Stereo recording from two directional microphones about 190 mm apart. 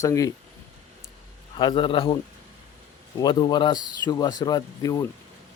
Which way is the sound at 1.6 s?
25° left (ahead or behind).